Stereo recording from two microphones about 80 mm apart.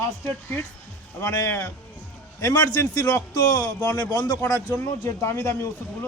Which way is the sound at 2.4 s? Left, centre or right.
Left.